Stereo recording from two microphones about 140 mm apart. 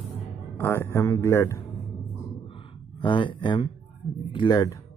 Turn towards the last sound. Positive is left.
turn(degrees=25)  # may be behind; listen again after turning